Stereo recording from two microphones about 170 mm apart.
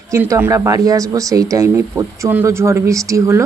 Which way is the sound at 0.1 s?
15° right (ahead or behind).